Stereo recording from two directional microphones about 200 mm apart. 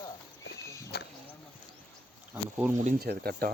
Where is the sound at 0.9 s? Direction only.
55° left (ahead or behind).